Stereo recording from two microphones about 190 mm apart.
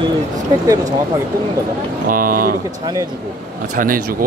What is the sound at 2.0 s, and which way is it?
Speech, 45° right (ahead or behind).